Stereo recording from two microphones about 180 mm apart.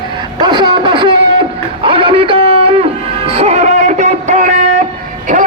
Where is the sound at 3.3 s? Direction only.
40° right (ahead or behind).